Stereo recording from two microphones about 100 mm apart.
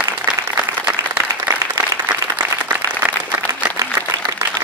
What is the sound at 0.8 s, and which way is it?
Applause, 15° right (ahead or behind).